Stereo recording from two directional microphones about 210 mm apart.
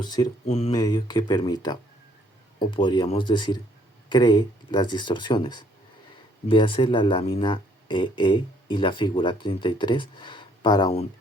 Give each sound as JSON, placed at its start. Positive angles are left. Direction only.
{"t": 0.0, "sound": "speech", "side_deg": 20}